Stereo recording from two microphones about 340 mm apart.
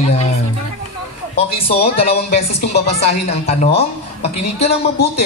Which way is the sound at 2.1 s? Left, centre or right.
Left.